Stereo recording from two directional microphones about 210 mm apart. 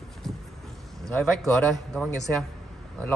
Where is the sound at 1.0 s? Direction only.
Centre (ahead or behind).